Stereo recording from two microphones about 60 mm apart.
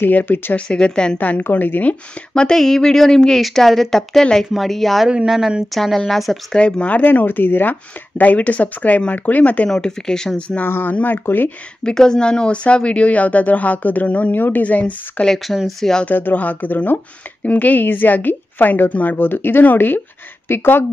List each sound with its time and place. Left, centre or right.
0.0 s speech: left
0.6 s a woman's voice: centre
1.1 s speech: left
2.3 s a woman's voice: centre
5.0 s speech: centre
5.8 s speech: centre
6.5 s speech: centre
9.7 s a woman's voice: centre
10.7 s speech: left
11.8 s speech: centre
15.2 s speech: centre
16.1 s speech: left